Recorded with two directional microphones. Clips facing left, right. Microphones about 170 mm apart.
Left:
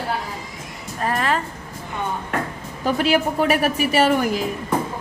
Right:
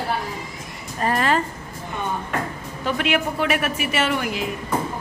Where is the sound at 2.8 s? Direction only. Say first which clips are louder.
Left 4 dB; 40° left (ahead or behind).